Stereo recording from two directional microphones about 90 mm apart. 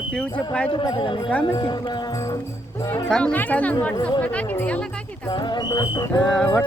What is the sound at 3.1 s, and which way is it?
Speech, 10° left (ahead or behind).